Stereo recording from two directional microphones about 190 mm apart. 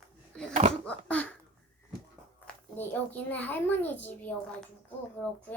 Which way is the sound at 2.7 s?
10° left (ahead or behind).